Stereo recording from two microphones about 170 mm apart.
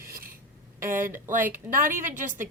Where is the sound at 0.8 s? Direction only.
55° right (ahead or behind).